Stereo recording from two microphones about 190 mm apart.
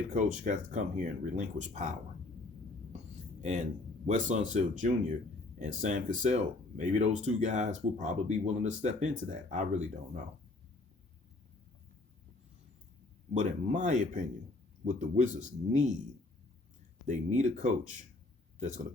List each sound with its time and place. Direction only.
0.1 s speech: 40° right (ahead or behind)
3.4 s speech: 40° right (ahead or behind)
13.3 s speech: 40° right (ahead or behind)
17.1 s speech: 40° right (ahead or behind)